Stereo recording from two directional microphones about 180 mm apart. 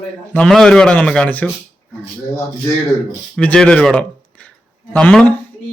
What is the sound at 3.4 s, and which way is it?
A man's voice, 5° left (ahead or behind).